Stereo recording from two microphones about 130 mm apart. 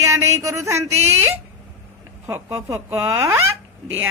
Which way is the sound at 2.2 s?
20° right (ahead or behind).